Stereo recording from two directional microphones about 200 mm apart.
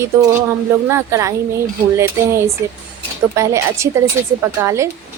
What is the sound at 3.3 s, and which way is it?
Speech, 15° right (ahead or behind).